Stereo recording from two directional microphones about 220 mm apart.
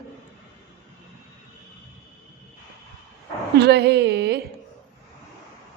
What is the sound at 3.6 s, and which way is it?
Speech, 50° right (ahead or behind).